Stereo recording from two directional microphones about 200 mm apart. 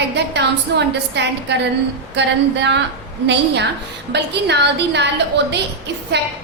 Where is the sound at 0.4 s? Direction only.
60° right (ahead or behind).